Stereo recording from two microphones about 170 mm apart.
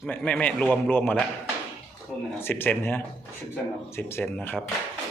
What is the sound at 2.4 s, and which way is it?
A man's voice, 10° left (ahead or behind).